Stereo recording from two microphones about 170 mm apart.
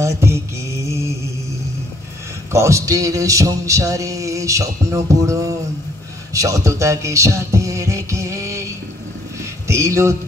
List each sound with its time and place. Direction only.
0.0 s mantra: 15° right (ahead or behind)
2.5 s a sound: 15° right (ahead or behind)
6.3 s music: 20° right (ahead or behind)
9.4 s vehicle: 15° right (ahead or behind)